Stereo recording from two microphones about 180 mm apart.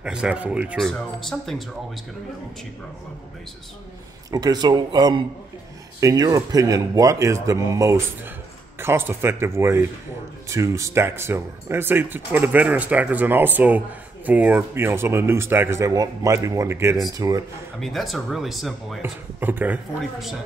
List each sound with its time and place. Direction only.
0.0 s speech: 5° right (ahead or behind)
4.3 s speech: 20° right (ahead or behind)
17.7 s speech: centre (ahead or behind)